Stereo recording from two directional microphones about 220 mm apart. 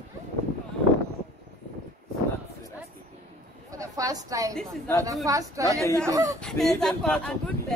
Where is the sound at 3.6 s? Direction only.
15° right (ahead or behind).